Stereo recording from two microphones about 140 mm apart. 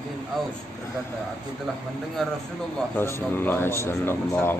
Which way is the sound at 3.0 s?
15° left (ahead or behind).